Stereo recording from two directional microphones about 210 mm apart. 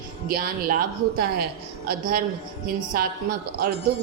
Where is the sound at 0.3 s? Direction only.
45° right (ahead or behind).